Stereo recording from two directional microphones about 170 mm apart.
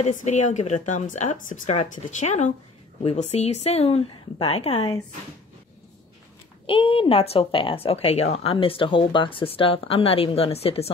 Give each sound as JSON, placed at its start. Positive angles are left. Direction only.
{"t": 0.0, "sound": "a woman's voice", "side_deg": 45}
{"t": 6.6, "sound": "a woman's voice", "side_deg": 30}